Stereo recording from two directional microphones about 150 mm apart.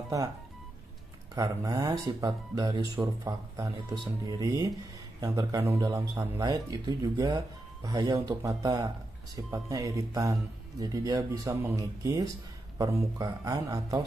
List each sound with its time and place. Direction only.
1.3 s speech: 25° right (ahead or behind)